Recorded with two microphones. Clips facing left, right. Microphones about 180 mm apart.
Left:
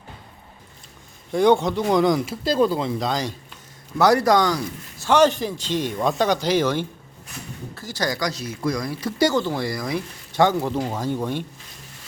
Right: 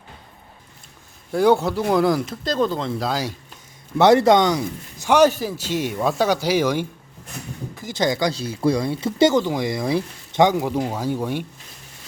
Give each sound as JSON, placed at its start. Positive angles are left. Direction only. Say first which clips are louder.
{"t": 1.3, "sound": "speech", "louder": "even", "side_deg": -5}
{"t": 3.9, "sound": "a man's voice", "louder": "right 3 dB", "side_deg": -25}
{"t": 10.4, "sound": "a man's voice", "louder": "right 2 dB", "side_deg": -10}